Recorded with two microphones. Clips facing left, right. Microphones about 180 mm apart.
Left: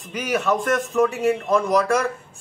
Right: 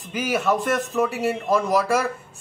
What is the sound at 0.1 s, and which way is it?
A man's voice, 5° right (ahead or behind).